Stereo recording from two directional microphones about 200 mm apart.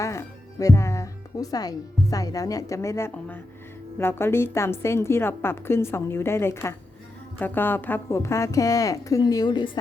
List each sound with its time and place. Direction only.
0.0 s a woman's voice: 15° left (ahead or behind)